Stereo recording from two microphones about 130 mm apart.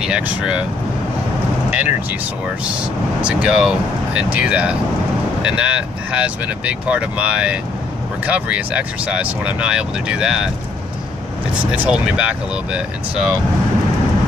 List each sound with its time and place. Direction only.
0.0 s speech: 5° right (ahead or behind)
1.7 s speech: 10° right (ahead or behind)
3.2 s speech: 10° right (ahead or behind)
11.7 s speech: 10° right (ahead or behind)